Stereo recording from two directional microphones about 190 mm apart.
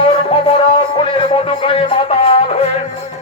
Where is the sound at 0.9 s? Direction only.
30° left (ahead or behind).